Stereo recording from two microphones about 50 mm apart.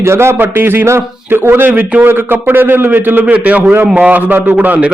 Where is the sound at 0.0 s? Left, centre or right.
Right.